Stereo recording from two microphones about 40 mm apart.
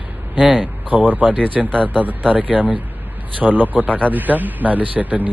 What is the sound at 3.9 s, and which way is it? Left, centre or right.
Speech, left.